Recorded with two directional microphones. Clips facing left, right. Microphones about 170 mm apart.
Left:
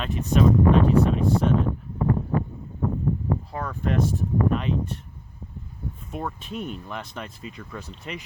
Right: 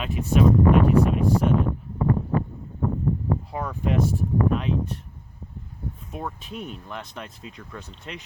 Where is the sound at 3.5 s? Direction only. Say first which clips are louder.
Right 1 dB; 10° right (ahead or behind).